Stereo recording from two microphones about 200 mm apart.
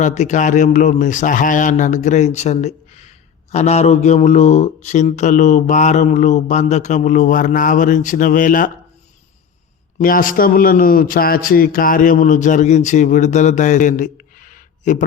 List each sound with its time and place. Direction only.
0.0 s speech: 35° left (ahead or behind)
10.0 s speech: 45° left (ahead or behind)